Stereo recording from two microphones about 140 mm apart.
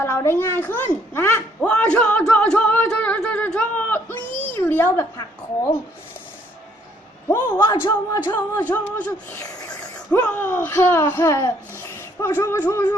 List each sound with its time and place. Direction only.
0.0 s a sound: 20° left (ahead or behind)
7.3 s speech: 20° left (ahead or behind)
7.6 s speech: 30° left (ahead or behind)
8.3 s speech: 15° left (ahead or behind)